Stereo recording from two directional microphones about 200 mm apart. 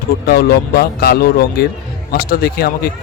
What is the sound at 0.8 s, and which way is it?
Speech, 50° left (ahead or behind).